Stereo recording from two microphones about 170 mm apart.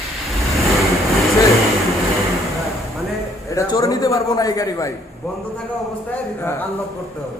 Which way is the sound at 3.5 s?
20° left (ahead or behind).